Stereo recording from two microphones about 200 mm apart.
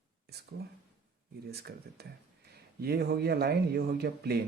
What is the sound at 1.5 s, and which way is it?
Speech, 55° right (ahead or behind).